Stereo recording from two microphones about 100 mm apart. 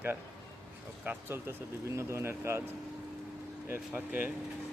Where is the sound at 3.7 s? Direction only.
20° right (ahead or behind).